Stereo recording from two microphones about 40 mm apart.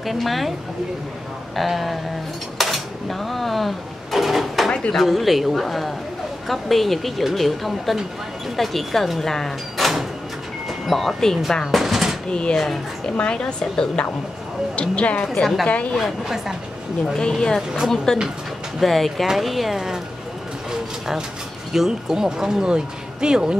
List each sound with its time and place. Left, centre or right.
0.0 s a woman's voice: centre
1.6 s a woman's voice: centre
2.6 s a sound: centre
4.6 s a sound: left
4.9 s a woman's voice: centre
11.6 s chopping: centre
12.3 s a woman's voice: left
16.0 s speech: centre
17.0 s a woman's voice: centre
21.7 s speech: centre